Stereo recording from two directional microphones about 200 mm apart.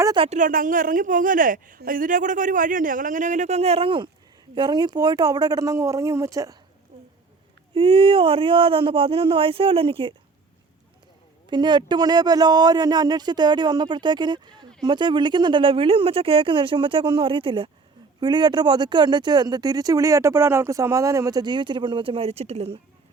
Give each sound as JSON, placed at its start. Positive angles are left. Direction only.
{"t": 0.0, "sound": "speech", "side_deg": -20}
{"t": 0.3, "sound": "a woman's voice", "side_deg": -40}
{"t": 6.9, "sound": "a sound", "side_deg": -30}
{"t": 7.8, "sound": "speech", "side_deg": -25}
{"t": 11.4, "sound": "speech", "side_deg": -20}